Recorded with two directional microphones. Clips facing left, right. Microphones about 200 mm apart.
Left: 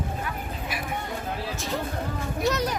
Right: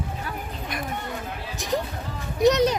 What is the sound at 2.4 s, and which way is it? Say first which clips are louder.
Speech: right 8 dB; 20° right (ahead or behind).